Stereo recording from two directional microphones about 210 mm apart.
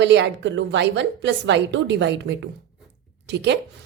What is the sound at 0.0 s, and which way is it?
A woman's voice, 60° right (ahead or behind).